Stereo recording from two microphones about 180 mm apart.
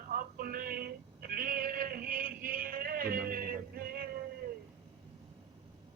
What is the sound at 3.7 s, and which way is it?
Music, 55° right (ahead or behind).